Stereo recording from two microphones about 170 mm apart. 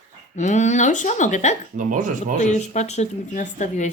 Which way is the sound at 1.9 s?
50° right (ahead or behind).